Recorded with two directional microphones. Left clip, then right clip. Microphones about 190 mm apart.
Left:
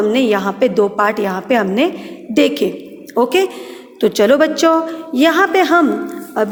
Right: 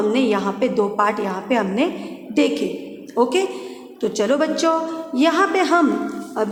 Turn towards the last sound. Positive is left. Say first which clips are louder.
# left 5 dB
turn(degrees=30)  # may be behind; listen again after turning